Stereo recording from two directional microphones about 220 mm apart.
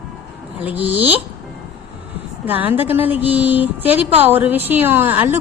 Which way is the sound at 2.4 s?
10° right (ahead or behind).